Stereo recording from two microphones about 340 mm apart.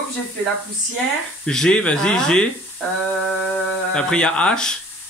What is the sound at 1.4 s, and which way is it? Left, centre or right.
Speech, centre.